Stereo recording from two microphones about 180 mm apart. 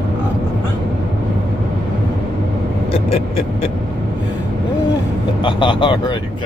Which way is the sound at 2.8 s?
30° left (ahead or behind).